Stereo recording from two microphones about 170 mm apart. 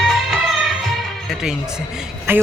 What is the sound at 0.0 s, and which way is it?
Music, centre (ahead or behind).